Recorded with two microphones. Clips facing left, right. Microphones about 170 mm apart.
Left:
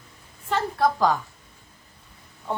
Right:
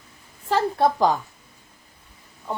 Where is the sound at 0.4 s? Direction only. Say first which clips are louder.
Right 3 dB; 35° right (ahead or behind).